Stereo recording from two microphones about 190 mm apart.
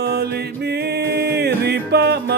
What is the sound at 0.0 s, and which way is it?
Music, 60° right (ahead or behind).